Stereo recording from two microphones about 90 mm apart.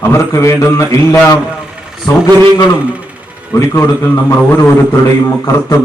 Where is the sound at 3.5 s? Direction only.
35° left (ahead or behind).